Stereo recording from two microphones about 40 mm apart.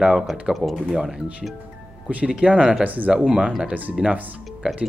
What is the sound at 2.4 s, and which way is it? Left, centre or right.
Speech, right.